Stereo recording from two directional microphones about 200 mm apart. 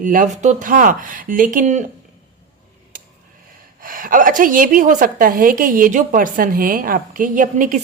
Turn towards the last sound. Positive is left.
turn(degrees=-40)  # may be behind; listen again after turning